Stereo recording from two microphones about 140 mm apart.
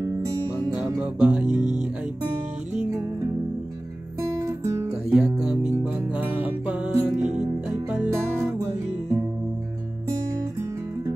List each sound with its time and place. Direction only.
0.0 s music: 20° right (ahead or behind)
0.9 s music: 5° right (ahead or behind)
1.6 s music: 55° right (ahead or behind)
4.4 s guitar: 20° right (ahead or behind)
5.1 s music: 5° right (ahead or behind)